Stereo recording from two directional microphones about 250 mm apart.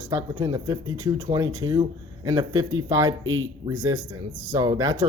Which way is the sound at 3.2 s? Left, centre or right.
Right.